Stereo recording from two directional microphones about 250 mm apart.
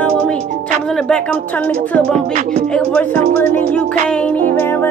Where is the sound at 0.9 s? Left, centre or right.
Centre.